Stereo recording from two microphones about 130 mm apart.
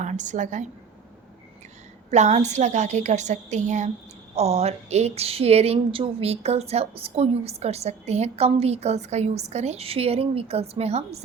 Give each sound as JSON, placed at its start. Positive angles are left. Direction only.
{"t": 0.0, "sound": "a woman's voice", "side_deg": -70}
{"t": 2.0, "sound": "a woman's voice", "side_deg": -60}
{"t": 4.4, "sound": "a woman's voice", "side_deg": -55}